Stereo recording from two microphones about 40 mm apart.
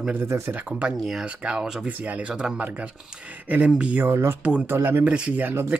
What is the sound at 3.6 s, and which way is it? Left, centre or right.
Speech, right.